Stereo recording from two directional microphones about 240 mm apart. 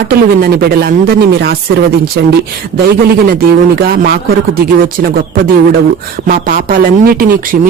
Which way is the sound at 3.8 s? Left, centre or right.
Right.